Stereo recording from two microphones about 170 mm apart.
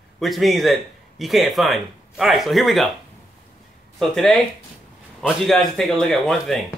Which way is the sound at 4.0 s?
5° left (ahead or behind).